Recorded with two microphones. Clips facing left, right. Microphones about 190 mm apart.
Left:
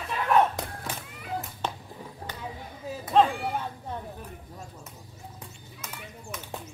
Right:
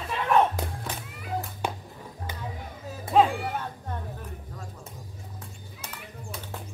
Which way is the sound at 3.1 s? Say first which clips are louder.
Right 1 dB; 5° right (ahead or behind).